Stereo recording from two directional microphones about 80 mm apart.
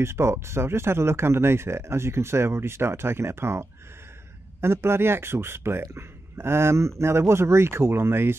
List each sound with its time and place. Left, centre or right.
0.0 s speech: right